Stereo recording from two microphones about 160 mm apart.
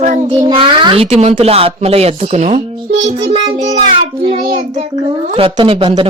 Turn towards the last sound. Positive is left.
turn(degrees=-35)  # may be behind; listen again after turning